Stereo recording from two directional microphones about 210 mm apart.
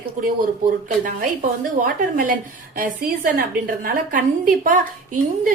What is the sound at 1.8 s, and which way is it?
A woman's voice, 40° right (ahead or behind).